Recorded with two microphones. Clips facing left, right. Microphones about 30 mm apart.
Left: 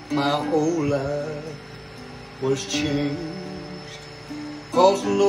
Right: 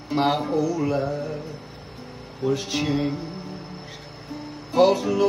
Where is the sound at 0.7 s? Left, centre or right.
Left.